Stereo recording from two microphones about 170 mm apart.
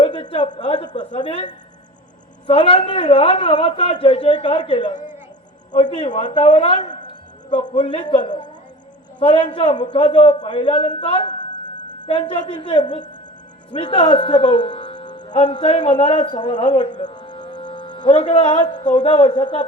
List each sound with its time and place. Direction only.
0.0 s a sound: 30° left (ahead or behind)
0.5 s speech: 30° left (ahead or behind)
2.5 s a man's voice: 35° left (ahead or behind)
5.9 s a man's voice: 30° left (ahead or behind)
7.8 s a man's voice: 30° left (ahead or behind)
16.9 s music: 25° left (ahead or behind)
19.1 s speech: 30° left (ahead or behind)